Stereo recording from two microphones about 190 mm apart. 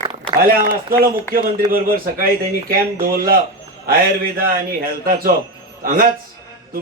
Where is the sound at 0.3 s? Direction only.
50° right (ahead or behind).